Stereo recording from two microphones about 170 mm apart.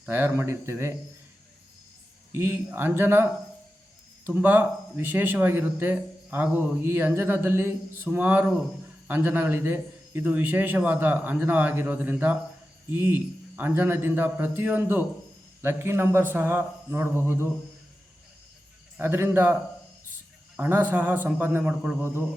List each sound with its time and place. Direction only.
0.0 s speech: 10° right (ahead or behind)
2.3 s speech: 15° right (ahead or behind)
4.3 s speech: 10° right (ahead or behind)
18.9 s speech: 15° right (ahead or behind)
20.6 s speech: 10° right (ahead or behind)